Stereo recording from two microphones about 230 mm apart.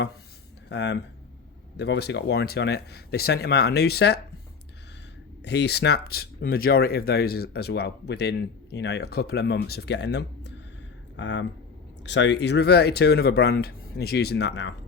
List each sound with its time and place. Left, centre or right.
0.7 s speech: left
5.5 s speech: left